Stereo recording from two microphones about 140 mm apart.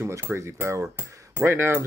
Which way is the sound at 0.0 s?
20° right (ahead or behind).